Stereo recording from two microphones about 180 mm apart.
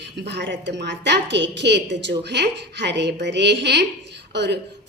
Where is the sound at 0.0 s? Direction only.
70° right (ahead or behind).